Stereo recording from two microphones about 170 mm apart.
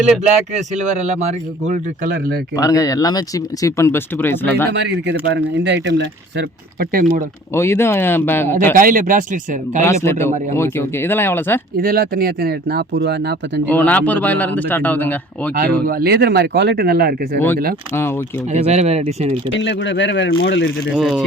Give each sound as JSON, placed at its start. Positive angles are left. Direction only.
{"t": 0.7, "sound": "speech", "side_deg": -45}
{"t": 2.1, "sound": "speech", "side_deg": -60}
{"t": 2.6, "sound": "speech", "side_deg": 20}
{"t": 4.7, "sound": "speech", "side_deg": -90}
{"t": 7.5, "sound": "a man's voice", "side_deg": 15}
{"t": 8.7, "sound": "speech", "side_deg": -55}
{"t": 9.8, "sound": "a man's voice", "side_deg": 15}
{"t": 11.8, "sound": "speech", "side_deg": -60}
{"t": 13.7, "sound": "a man's voice", "side_deg": 10}
{"t": 15.9, "sound": "speech", "side_deg": -65}
{"t": 17.9, "sound": "a man's voice", "side_deg": 15}
{"t": 18.5, "sound": "speech", "side_deg": -40}
{"t": 19.5, "sound": "speech", "side_deg": 90}
{"t": 20.9, "sound": "speech", "side_deg": 0}